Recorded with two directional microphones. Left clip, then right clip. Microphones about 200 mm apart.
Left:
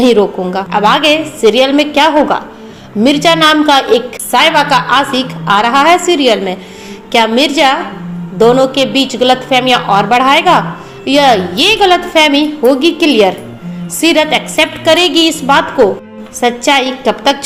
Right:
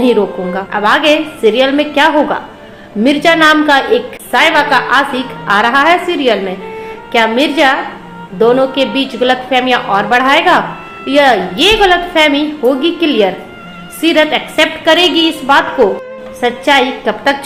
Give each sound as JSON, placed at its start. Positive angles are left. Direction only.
{"t": 0.0, "sound": "a woman's voice", "side_deg": 35}